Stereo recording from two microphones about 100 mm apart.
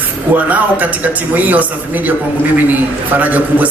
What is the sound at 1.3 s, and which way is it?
A man's voice, 15° right (ahead or behind).